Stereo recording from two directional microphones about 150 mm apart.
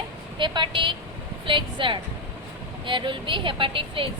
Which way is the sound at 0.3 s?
30° right (ahead or behind).